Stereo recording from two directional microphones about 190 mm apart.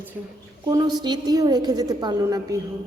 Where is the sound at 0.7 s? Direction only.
20° right (ahead or behind).